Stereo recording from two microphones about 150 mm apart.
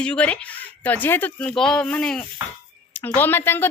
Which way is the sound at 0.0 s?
5° left (ahead or behind).